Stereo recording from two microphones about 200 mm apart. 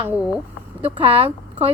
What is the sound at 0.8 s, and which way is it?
Speech, 30° right (ahead or behind).